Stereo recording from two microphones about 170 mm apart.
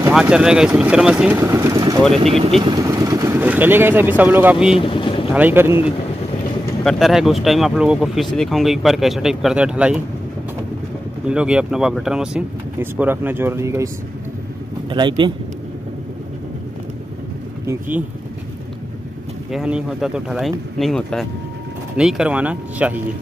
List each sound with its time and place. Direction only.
0.1 s speech: 5° right (ahead or behind)
1.4 s speech: 15° right (ahead or behind)
2.1 s speech: 35° right (ahead or behind)
2.6 s speech: 20° right (ahead or behind)
4.7 s speech: 30° left (ahead or behind)
5.3 s speech: 10° right (ahead or behind)
6.8 s speech: centre (ahead or behind)
11.2 s speech: 5° right (ahead or behind)
14.9 s speech: 25° right (ahead or behind)
17.6 s speech: 10° right (ahead or behind)
19.5 s speech: 5° right (ahead or behind)